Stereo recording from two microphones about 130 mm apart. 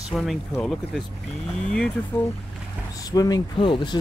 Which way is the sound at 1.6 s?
5° left (ahead or behind).